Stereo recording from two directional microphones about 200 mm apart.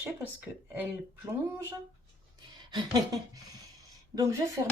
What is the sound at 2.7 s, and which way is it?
Speech, 20° right (ahead or behind).